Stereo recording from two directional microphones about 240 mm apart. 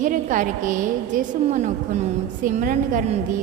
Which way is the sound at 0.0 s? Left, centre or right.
Right.